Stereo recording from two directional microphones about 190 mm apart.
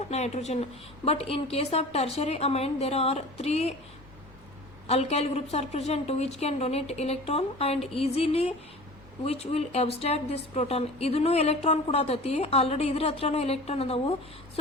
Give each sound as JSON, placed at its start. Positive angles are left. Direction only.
{"t": 0.1, "sound": "a woman's voice", "side_deg": 35}
{"t": 4.9, "sound": "a woman's voice", "side_deg": 35}